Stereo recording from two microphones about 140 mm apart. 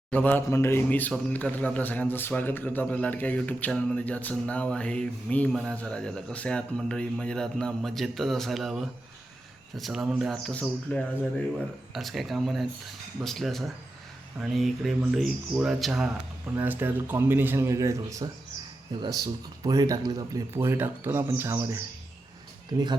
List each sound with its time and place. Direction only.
0.1 s a man's voice: 10° left (ahead or behind); by 16.1 s 5° right (ahead or behind)
16.6 s a man's voice: 15° right (ahead or behind)